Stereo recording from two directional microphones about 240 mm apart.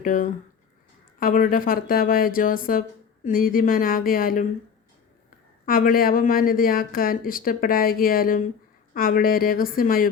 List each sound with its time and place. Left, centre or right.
0.0 s speech: left
5.6 s speech: left